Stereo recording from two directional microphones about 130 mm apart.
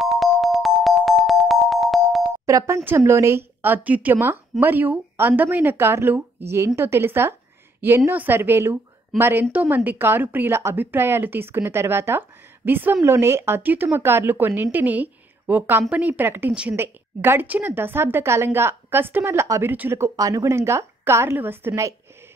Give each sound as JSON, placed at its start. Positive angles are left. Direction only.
{"t": 0.0, "sound": "music", "side_deg": 0}
{"t": 2.4, "sound": "a woman's voice", "side_deg": -25}